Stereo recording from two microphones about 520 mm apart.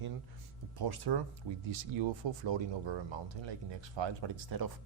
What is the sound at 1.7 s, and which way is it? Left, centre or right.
Speech, right.